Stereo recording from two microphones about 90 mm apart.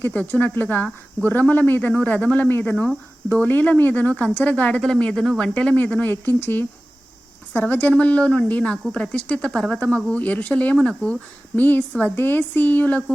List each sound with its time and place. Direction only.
0.0 s speech: 15° left (ahead or behind)